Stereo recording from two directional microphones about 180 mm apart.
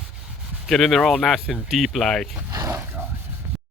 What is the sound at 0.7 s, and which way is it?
Speech, centre (ahead or behind).